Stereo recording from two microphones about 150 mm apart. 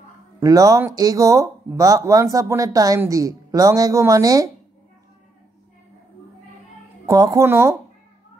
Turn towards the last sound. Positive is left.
turn(degrees=-20)  # may be behind; listen again after turning